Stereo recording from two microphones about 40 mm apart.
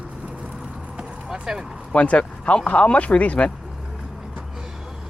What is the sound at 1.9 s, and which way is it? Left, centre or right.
Speech, left.